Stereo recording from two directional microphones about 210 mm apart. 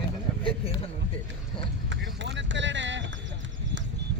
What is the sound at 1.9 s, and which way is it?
Vehicle, 60° right (ahead or behind).